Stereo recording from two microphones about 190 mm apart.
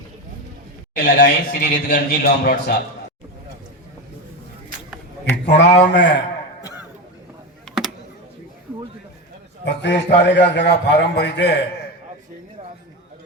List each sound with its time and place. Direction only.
0.9 s a man's voice: 55° left (ahead or behind)
5.5 s a man's voice: 65° left (ahead or behind)
9.6 s a man's voice: 65° left (ahead or behind)